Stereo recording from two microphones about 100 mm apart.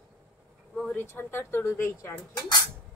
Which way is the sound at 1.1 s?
20° left (ahead or behind).